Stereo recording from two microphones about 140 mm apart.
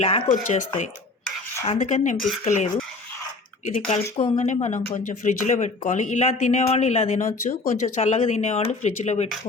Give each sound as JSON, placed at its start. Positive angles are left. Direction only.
{"t": 0.3, "sound": "speech", "side_deg": 60}
{"t": 3.8, "sound": "speech", "side_deg": 50}